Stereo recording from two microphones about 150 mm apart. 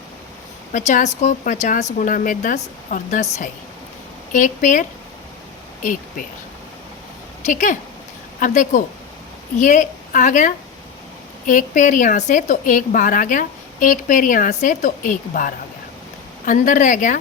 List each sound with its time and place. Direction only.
0.7 s a woman's voice: 55° left (ahead or behind)
4.3 s a woman's voice: 60° left (ahead or behind)
7.4 s a woman's voice: 55° left (ahead or behind)